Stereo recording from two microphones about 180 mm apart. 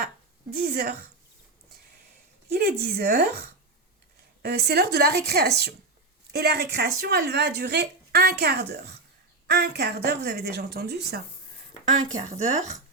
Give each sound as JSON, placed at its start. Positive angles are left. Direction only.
{"t": 0.6, "sound": "a woman's voice", "side_deg": -55}
{"t": 2.5, "sound": "speech", "side_deg": -60}
{"t": 4.4, "sound": "speech", "side_deg": -65}
{"t": 12.1, "sound": "speech", "side_deg": -40}